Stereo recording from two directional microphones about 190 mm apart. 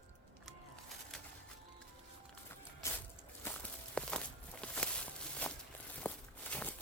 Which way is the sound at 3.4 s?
10° left (ahead or behind).